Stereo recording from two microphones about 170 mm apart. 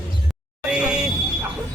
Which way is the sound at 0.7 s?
5° right (ahead or behind).